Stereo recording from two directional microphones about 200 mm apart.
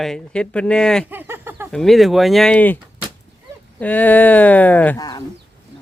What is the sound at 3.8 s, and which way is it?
Speech, 5° left (ahead or behind).